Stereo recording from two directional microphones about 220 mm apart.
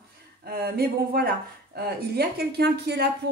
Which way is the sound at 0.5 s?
45° right (ahead or behind).